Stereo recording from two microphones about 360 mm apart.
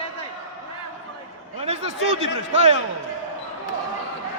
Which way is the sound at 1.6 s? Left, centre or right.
Centre.